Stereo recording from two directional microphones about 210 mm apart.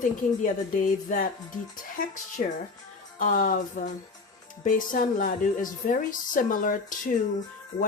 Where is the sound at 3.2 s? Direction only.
40° left (ahead or behind).